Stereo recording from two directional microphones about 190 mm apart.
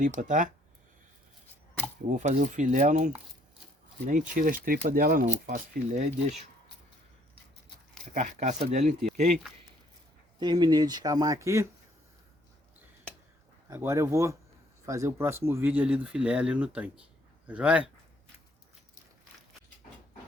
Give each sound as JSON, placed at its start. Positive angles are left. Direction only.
{"t": 0.2, "sound": "speech", "side_deg": -40}
{"t": 2.0, "sound": "speech", "side_deg": -40}
{"t": 8.1, "sound": "speech", "side_deg": -40}
{"t": 10.4, "sound": "speech", "side_deg": -20}
{"t": 13.7, "sound": "speech", "side_deg": -15}